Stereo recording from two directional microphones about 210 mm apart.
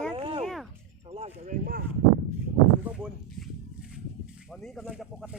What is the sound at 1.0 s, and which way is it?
Speech, 30° right (ahead or behind).